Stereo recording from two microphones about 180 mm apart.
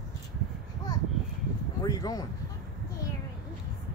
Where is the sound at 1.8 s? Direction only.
20° left (ahead or behind).